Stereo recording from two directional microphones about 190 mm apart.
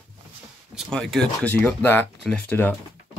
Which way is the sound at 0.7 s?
Centre (ahead or behind).